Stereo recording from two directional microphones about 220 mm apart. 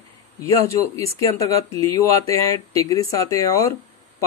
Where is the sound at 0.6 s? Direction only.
15° left (ahead or behind).